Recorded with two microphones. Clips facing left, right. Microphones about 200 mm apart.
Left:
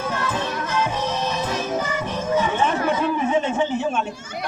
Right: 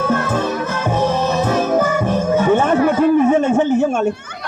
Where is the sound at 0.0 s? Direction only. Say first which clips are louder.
Right 8 dB; 50° right (ahead or behind).